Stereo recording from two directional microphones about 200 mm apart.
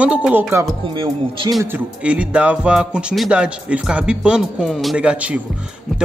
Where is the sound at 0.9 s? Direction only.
25° right (ahead or behind).